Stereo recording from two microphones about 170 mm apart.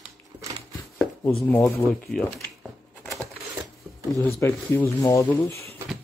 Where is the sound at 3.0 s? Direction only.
Centre (ahead or behind).